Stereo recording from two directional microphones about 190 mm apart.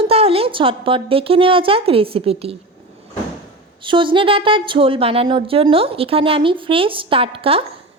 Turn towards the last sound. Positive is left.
turn(degrees=-30)  # may be behind; listen again after turning